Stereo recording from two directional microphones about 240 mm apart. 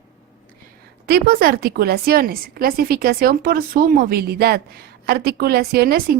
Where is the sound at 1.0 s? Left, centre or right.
Right.